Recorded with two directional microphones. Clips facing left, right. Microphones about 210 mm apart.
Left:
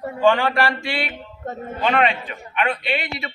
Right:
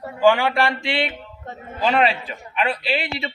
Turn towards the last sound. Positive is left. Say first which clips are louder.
# right 1 dB
turn(degrees=-30)  # may be behind; listen again after turning